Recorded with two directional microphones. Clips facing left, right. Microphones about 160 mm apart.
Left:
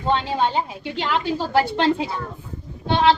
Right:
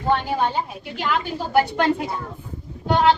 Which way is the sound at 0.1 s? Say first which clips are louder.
Even; 25° left (ahead or behind).